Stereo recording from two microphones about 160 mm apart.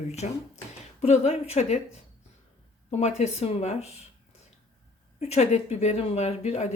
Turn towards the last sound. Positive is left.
turn(degrees=45)  # may be behind; listen again after turning